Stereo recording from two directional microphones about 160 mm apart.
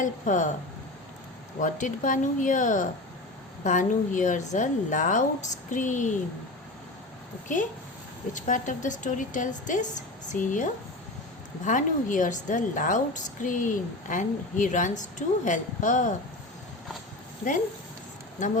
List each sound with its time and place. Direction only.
0.0 s a woman's voice: 55° left (ahead or behind)
1.6 s a woman's voice: 55° left (ahead or behind)
7.4 s a woman's voice: 55° left (ahead or behind)
18.3 s speech: 50° left (ahead or behind)